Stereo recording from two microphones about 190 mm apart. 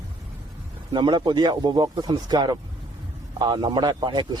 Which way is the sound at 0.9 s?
25° right (ahead or behind).